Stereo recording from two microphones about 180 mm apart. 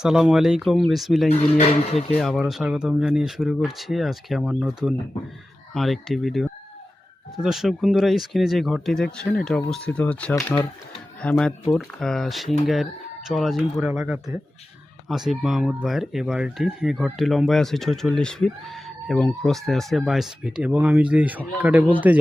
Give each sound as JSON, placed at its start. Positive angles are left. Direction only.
{"t": 0.0, "sound": "speech", "side_deg": -5}
{"t": 1.3, "sound": "speech", "side_deg": 35}
{"t": 2.1, "sound": "speech", "side_deg": 0}